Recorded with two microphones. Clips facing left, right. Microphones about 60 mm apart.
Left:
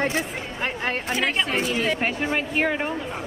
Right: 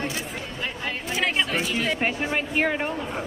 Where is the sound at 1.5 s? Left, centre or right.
Left.